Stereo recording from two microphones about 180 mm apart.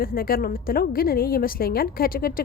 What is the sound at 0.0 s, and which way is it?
A woman's voice, 55° left (ahead or behind).